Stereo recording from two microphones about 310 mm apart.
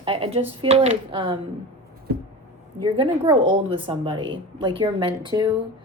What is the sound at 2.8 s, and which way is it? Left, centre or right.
A woman's voice, centre.